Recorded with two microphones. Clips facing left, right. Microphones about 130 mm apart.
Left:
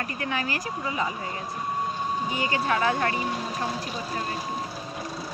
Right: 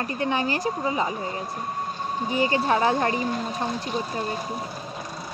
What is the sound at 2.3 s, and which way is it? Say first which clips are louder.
Speech: right 6 dB; 30° right (ahead or behind).